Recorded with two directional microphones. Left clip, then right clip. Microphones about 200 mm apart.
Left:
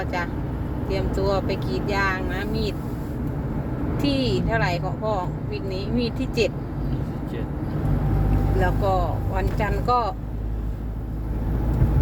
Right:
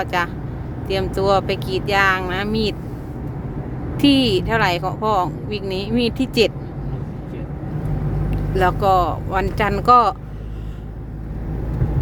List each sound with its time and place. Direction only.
0.0 s speech: 40° right (ahead or behind)
3.9 s speech: 40° right (ahead or behind)
8.5 s speech: 45° right (ahead or behind)